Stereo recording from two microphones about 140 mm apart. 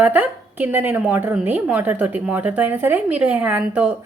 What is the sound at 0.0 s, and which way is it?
A woman's voice, 15° right (ahead or behind).